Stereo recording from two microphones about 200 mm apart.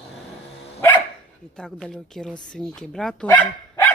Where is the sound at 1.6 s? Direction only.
5° left (ahead or behind).